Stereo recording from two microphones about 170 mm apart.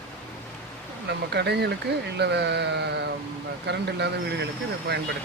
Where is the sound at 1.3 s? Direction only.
75° right (ahead or behind).